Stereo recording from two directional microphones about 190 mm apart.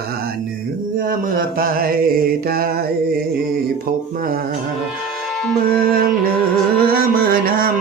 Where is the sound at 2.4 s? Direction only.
50° right (ahead or behind).